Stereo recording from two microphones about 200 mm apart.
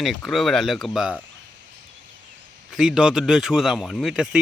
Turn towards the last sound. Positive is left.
turn(degrees=0)  # may be behind; listen again after turning